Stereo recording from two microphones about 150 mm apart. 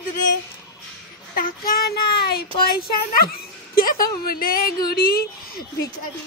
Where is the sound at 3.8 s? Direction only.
75° left (ahead or behind).